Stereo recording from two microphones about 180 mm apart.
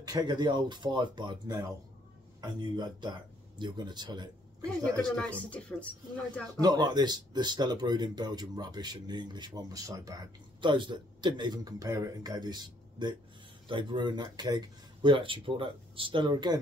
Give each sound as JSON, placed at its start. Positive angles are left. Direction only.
{"t": 0.0, "sound": "speech", "side_deg": -20}
{"t": 4.6, "sound": "a woman's voice", "side_deg": 5}
{"t": 6.6, "sound": "speech", "side_deg": -25}